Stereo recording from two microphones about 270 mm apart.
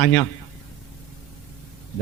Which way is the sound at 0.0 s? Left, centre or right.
Centre.